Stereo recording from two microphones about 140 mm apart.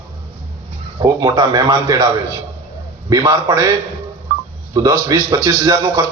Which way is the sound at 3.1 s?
25° right (ahead or behind).